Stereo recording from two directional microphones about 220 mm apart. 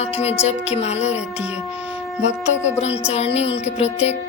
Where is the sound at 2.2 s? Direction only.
30° left (ahead or behind).